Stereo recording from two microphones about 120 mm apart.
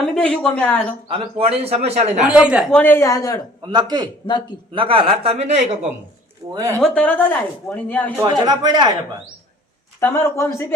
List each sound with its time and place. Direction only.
0.0 s speech: 5° left (ahead or behind)
1.0 s a man's voice: 50° right (ahead or behind)
2.2 s speech: 5° right (ahead or behind)
2.6 s speech: 10° left (ahead or behind)
3.0 s a man's voice: 30° left (ahead or behind)
3.6 s speech: 40° right (ahead or behind)
4.7 s speech: 45° right (ahead or behind); by 5.7 s 65° right (ahead or behind)
6.5 s speech: 30° right (ahead or behind)
6.7 s speech: 10° left (ahead or behind)
8.2 s speech: 35° right (ahead or behind)
10.0 s a man's voice: 20° left (ahead or behind)